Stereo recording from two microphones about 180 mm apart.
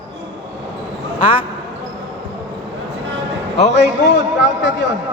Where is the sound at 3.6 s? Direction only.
40° left (ahead or behind).